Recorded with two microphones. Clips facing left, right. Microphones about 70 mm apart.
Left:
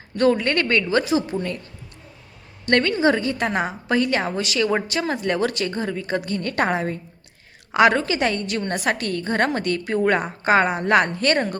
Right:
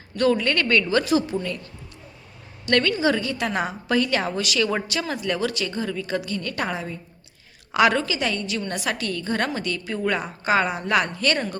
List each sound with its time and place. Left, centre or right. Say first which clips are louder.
0.2 s a woman's voice: left 2 dB; left
1.4 s a woman's voice: left 2 dB; left
2.6 s a woman's voice: left 2 dB; left